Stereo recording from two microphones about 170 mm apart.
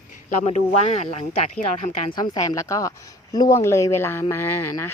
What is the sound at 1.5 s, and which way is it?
Speech, 50° left (ahead or behind).